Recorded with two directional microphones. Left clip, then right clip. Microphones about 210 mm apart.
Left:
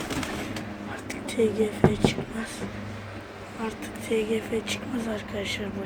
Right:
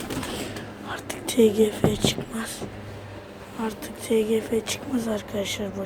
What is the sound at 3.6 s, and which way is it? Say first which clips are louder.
Speech: right 2 dB; 20° right (ahead or behind).